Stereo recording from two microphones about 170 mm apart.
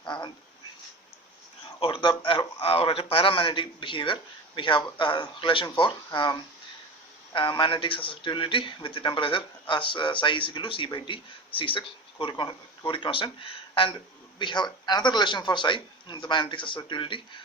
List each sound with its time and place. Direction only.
1.8 s speech: 30° left (ahead or behind)